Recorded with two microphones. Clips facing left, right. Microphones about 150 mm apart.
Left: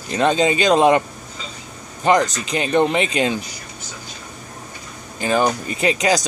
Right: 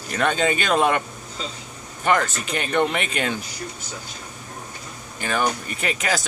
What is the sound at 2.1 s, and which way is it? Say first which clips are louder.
Speech: left 4 dB; 35° left (ahead or behind).